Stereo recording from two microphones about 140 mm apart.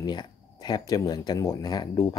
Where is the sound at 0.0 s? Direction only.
30° left (ahead or behind).